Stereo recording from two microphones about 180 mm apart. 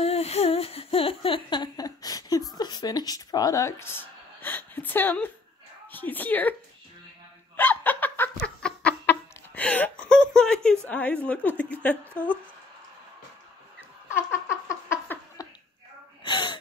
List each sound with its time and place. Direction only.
0.0 s humming: 35° left (ahead or behind); by 2.4 s 20° left (ahead or behind)
2.5 s a woman's voice: 20° left (ahead or behind)
7.5 s snicker: 10° left (ahead or behind)
10.3 s a woman's voice: 5° left (ahead or behind)
14.3 s a sound: 15° left (ahead or behind)
16.3 s gasp: 25° left (ahead or behind)